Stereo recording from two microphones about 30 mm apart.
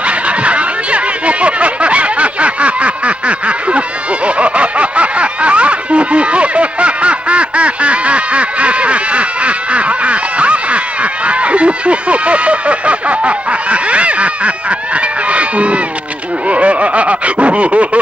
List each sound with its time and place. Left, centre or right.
0.0 s chatter: right
4.4 s snicker: right